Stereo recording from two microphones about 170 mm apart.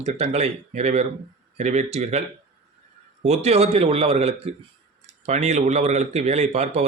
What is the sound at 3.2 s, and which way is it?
Speech, 40° right (ahead or behind).